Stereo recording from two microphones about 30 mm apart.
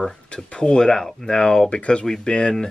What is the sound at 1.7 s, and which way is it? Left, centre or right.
Speech, left.